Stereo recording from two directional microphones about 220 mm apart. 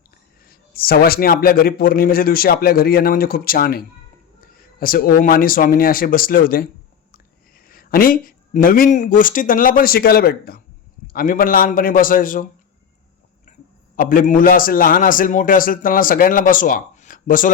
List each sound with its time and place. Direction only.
0.4 s a man's voice: 40° left (ahead or behind)
7.7 s a man's voice: 40° left (ahead or behind)
13.9 s a man's voice: 40° left (ahead or behind)